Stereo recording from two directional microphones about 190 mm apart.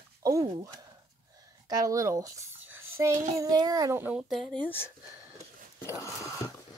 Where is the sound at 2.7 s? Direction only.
90° right.